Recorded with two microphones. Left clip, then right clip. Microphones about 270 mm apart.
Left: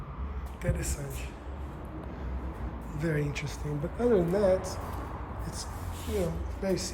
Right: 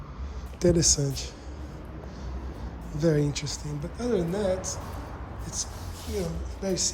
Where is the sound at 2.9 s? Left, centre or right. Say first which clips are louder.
Right 7 dB; centre.